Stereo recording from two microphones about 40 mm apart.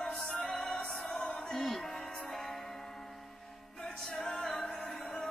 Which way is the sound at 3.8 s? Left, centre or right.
Left.